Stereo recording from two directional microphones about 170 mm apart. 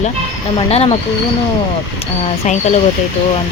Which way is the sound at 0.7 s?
35° left (ahead or behind).